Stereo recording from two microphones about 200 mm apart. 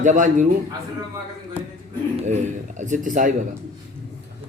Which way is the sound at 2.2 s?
35° right (ahead or behind).